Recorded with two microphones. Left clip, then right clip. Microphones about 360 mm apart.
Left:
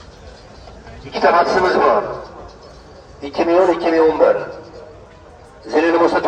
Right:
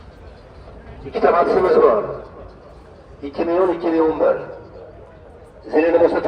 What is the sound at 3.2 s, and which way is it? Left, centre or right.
Speech, left.